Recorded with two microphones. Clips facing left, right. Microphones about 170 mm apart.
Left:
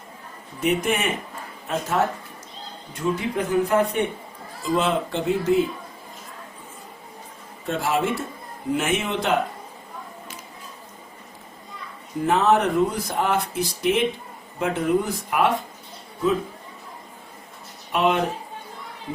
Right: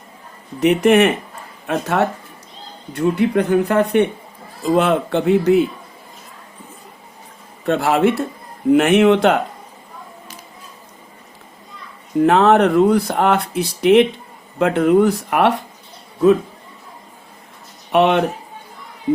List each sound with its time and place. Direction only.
0.6 s speech: 70° right (ahead or behind)
7.6 s speech: 70° right (ahead or behind)
12.2 s speech: 70° right (ahead or behind)
17.9 s speech: 70° right (ahead or behind)